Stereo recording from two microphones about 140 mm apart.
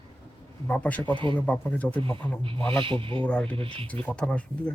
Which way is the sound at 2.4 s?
40° right (ahead or behind).